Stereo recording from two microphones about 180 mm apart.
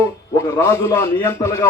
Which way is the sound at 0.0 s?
15° left (ahead or behind).